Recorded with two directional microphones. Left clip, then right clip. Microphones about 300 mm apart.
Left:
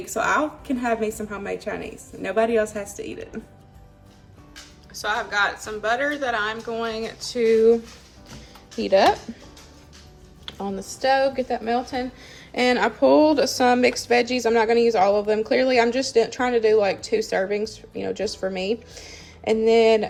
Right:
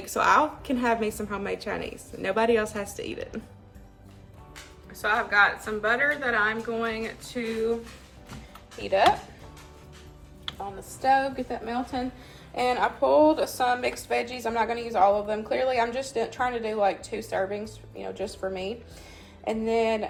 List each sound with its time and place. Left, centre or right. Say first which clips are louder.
0.0 s a woman's voice: right 1 dB; centre
4.9 s a woman's voice: right 1 dB; centre
10.8 s speech: left 3 dB; left